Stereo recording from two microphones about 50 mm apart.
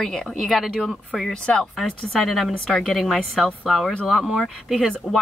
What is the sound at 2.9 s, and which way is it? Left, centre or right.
Speech, centre.